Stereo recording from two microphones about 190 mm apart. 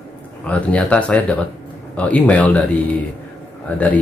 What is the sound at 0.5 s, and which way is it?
Speech, 5° left (ahead or behind).